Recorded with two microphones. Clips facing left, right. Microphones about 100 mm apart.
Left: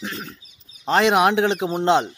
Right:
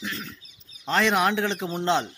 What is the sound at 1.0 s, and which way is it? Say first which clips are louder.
Speech: left 5 dB; 20° left (ahead or behind).